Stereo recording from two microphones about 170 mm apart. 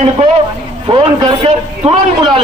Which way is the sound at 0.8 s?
25° right (ahead or behind).